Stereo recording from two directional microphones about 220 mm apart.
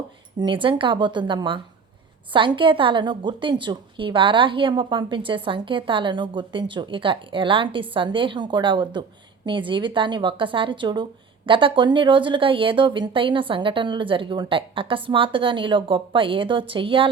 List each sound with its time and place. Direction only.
0.3 s a woman's voice: 20° right (ahead or behind)